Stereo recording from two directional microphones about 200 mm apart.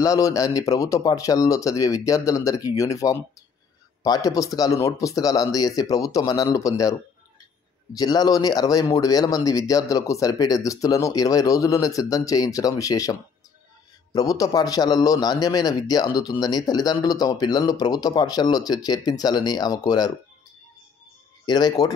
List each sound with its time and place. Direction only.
0.0 s a man's voice: 15° left (ahead or behind)
21.5 s a man's voice: 20° left (ahead or behind)